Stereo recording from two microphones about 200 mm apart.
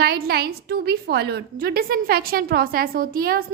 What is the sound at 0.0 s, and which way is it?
A woman's voice, 50° right (ahead or behind).